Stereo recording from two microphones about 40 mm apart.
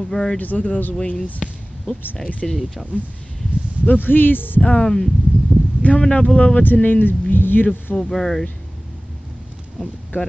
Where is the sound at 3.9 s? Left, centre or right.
Left.